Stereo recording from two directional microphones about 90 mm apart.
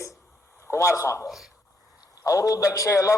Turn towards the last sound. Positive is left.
turn(degrees=35)  # may be behind; listen again after turning